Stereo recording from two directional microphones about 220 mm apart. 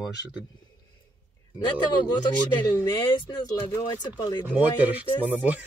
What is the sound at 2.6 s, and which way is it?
Speech, 15° left (ahead or behind).